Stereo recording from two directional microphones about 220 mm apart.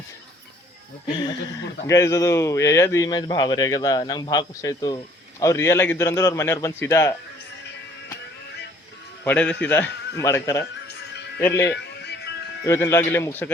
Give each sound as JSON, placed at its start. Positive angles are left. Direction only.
{"t": 1.9, "sound": "a man's voice", "side_deg": 15}
{"t": 9.2, "sound": "a man's voice", "side_deg": 5}
{"t": 10.8, "sound": "music", "side_deg": 50}
{"t": 11.3, "sound": "speech", "side_deg": 10}
{"t": 12.6, "sound": "a man's voice", "side_deg": 10}